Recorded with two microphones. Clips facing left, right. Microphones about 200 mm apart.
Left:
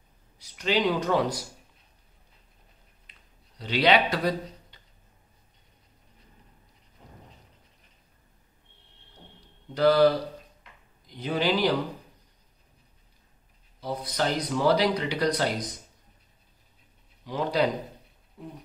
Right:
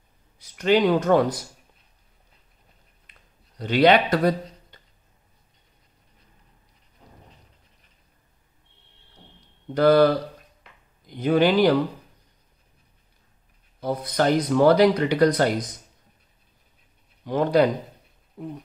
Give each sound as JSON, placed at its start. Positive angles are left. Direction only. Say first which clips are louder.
{"t": 0.4, "sound": "speech", "louder": "right 7 dB", "side_deg": -55}
{"t": 3.1, "sound": "a sound", "louder": "right 3 dB", "side_deg": -50}
{"t": 9.8, "sound": "speech", "louder": "right 4 dB", "side_deg": -55}
{"t": 11.1, "sound": "speech", "louder": "right 7 dB", "side_deg": -55}
{"t": 13.7, "sound": "speech", "louder": "right 6 dB", "side_deg": -55}
{"t": 17.2, "sound": "speech", "louder": "right 7 dB", "side_deg": -55}